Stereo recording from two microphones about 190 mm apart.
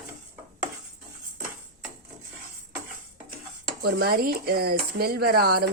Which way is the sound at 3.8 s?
55° right (ahead or behind).